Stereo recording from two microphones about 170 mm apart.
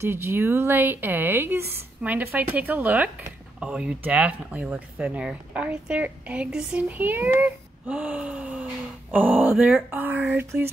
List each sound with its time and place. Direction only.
0.0 s speech: 15° right (ahead or behind)